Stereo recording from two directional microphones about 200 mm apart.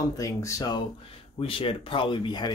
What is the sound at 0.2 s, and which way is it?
Speech, 15° left (ahead or behind).